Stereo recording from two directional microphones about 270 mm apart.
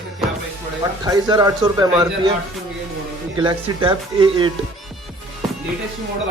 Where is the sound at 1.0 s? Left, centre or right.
Centre.